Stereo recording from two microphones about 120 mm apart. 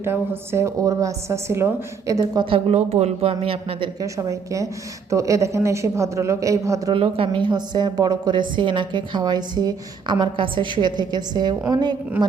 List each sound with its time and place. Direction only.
0.0 s a woman's voice: 20° right (ahead or behind)
2.4 s speech: 45° right (ahead or behind)
2.7 s speech: 65° right (ahead or behind)
4.0 s a woman's voice: 25° right (ahead or behind)
6.9 s a woman's voice: 50° right (ahead or behind)